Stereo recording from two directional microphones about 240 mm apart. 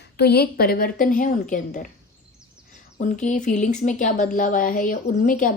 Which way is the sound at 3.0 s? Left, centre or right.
Left.